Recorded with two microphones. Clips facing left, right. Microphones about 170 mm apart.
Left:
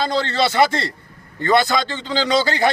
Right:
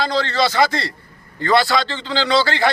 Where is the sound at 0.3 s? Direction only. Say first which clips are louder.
Even; 25° left (ahead or behind).